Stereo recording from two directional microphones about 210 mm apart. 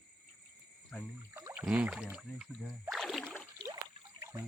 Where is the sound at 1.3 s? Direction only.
10° right (ahead or behind).